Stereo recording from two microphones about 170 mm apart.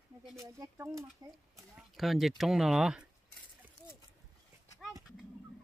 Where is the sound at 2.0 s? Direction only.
Centre (ahead or behind).